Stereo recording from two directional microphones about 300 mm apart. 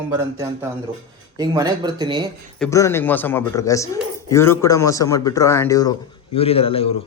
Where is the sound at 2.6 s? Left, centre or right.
Centre.